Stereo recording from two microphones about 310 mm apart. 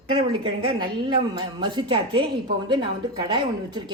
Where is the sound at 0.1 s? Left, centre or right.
Centre.